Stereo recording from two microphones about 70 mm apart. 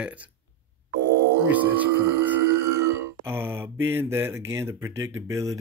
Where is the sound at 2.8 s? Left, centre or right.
Right.